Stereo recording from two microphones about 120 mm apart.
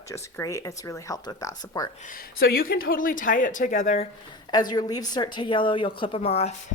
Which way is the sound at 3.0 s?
90° left.